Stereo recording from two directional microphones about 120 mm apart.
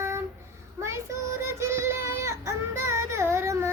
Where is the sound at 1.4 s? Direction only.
20° right (ahead or behind).